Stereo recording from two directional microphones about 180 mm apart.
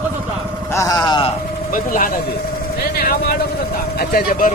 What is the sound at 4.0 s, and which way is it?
Speech, 55° left (ahead or behind).